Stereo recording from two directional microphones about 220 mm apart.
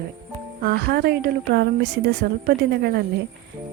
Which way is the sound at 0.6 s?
45° right (ahead or behind).